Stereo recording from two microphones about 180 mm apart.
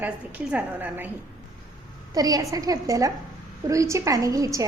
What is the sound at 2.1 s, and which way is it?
A woman's voice, 20° right (ahead or behind).